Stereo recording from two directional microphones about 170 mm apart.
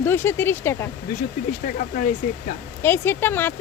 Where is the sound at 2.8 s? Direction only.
15° left (ahead or behind).